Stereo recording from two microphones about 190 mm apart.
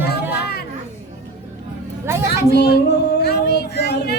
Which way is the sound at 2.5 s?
60° left (ahead or behind).